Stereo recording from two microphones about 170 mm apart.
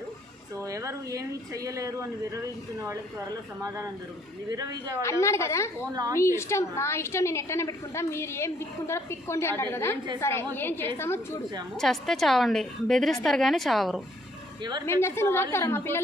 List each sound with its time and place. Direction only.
0.6 s a woman's voice: 20° right (ahead or behind)
5.2 s a woman's voice: 15° left (ahead or behind)
11.7 s a woman's voice: centre (ahead or behind)
14.9 s a woman's voice: 15° left (ahead or behind)